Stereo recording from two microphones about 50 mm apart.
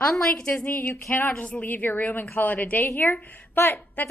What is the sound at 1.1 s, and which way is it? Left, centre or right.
A woman's voice, left.